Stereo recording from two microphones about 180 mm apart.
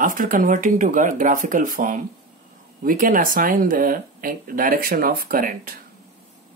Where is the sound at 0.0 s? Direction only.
50° right (ahead or behind).